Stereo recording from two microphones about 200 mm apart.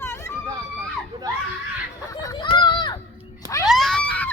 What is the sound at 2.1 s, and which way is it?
Speech, 15° left (ahead or behind).